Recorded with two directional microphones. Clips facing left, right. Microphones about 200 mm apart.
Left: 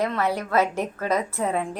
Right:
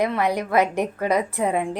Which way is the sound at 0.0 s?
15° right (ahead or behind).